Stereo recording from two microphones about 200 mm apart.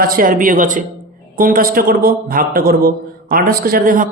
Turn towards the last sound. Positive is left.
turn(degrees=-45)  # may be behind; listen again after turning